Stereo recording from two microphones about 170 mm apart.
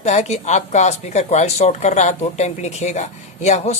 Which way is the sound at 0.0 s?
45° left (ahead or behind).